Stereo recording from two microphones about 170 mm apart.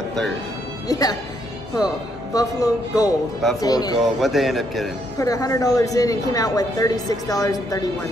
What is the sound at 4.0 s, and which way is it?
Speech, centre (ahead or behind).